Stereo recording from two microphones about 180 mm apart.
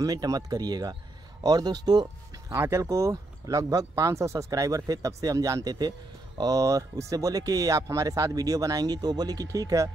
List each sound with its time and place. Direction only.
0.0 s speech: 20° right (ahead or behind)